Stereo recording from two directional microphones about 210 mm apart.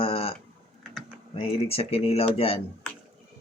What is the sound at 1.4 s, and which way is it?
Speech, 30° left (ahead or behind).